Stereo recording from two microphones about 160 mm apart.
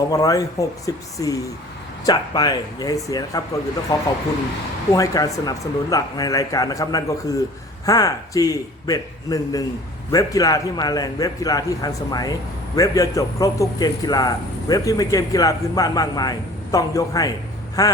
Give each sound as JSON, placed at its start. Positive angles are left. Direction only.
{"t": 0.1, "sound": "a man's voice", "side_deg": 20}